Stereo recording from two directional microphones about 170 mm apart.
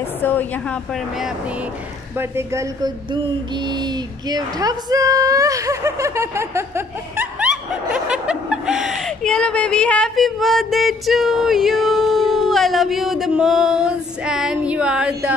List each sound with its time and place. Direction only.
0.2 s a woman's voice: 10° left (ahead or behind)
2.1 s speech: 15° right (ahead or behind)